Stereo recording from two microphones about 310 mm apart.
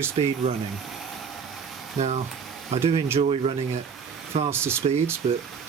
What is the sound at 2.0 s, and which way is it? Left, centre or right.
Speech, right.